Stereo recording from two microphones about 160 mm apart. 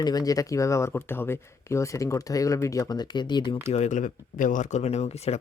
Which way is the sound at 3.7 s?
45° left (ahead or behind).